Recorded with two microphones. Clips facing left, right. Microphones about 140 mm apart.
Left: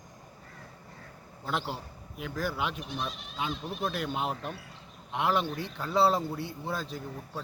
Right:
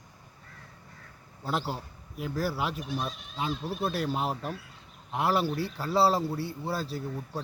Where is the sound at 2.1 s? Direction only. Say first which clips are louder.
Right 2 dB; 40° right (ahead or behind).